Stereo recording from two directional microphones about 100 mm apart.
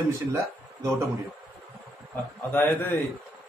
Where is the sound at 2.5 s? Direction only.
20° left (ahead or behind).